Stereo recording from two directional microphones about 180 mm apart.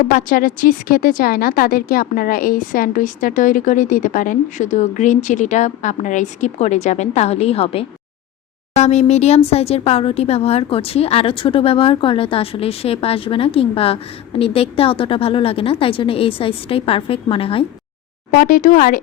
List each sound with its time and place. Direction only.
0.1 s speech: 50° left (ahead or behind); by 17.7 s 30° left (ahead or behind)
18.3 s speech: 50° left (ahead or behind)